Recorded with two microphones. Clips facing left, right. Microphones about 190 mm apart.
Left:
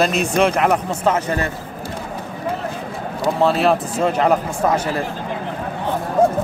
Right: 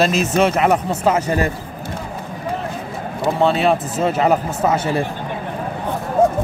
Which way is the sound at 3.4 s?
Centre (ahead or behind).